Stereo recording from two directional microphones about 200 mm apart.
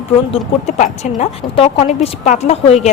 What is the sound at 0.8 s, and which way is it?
Speech, 30° left (ahead or behind).